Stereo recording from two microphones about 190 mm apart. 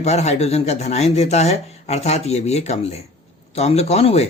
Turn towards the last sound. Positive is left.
turn(degrees=35)  # may be behind; listen again after turning